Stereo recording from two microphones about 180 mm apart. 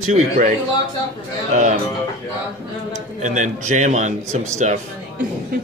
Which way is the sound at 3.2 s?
40° right (ahead or behind).